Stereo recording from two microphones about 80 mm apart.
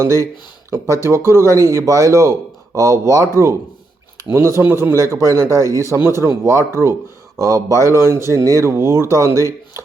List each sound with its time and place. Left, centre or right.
0.0 s speech: right